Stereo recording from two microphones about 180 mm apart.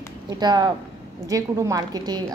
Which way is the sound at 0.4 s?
25° right (ahead or behind).